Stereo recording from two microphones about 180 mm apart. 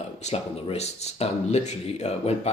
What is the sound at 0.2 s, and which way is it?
Speech, 35° left (ahead or behind).